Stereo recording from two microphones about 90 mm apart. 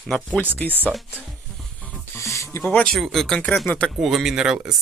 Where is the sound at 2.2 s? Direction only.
35° left (ahead or behind).